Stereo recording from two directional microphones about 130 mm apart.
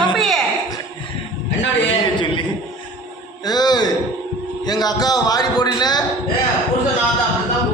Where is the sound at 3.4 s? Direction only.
30° left (ahead or behind).